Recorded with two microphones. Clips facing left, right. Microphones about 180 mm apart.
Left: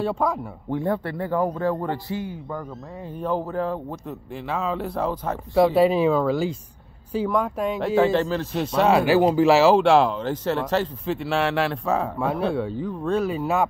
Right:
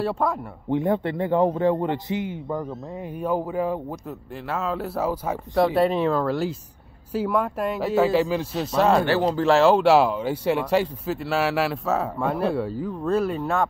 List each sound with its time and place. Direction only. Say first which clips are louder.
0.0 s speech: even; centre (ahead or behind)
0.7 s a man's voice: right 3 dB; 20° right (ahead or behind); by 13.7 s 5° left (ahead or behind)